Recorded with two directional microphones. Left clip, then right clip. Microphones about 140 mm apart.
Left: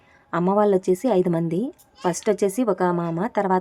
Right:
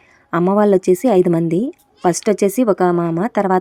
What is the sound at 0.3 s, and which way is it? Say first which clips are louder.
A woman's voice: right 5 dB; 30° right (ahead or behind).